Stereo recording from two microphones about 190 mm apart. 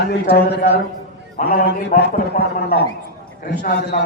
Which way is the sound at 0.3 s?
55° left (ahead or behind).